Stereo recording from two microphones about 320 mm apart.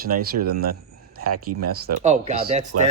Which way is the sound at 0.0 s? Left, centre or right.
Right.